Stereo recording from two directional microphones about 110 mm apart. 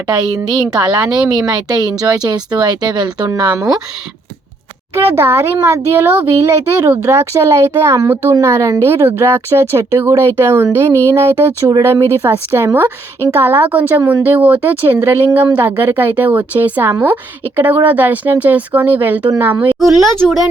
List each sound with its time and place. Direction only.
0.7 s speech: 40° right (ahead or behind)
4.9 s a child's voice: 20° right (ahead or behind)